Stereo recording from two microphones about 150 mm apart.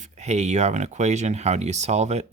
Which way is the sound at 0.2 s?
50° right (ahead or behind).